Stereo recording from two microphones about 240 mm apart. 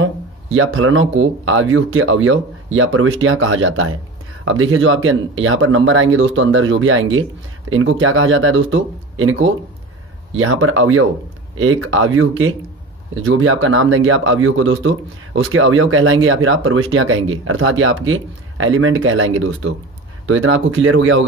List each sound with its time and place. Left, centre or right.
0.0 s speech: right